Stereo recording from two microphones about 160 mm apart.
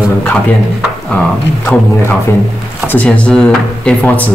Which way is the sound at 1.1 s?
15° left (ahead or behind).